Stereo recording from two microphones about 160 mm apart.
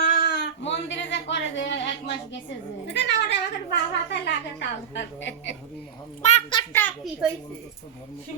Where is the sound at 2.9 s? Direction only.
90° left.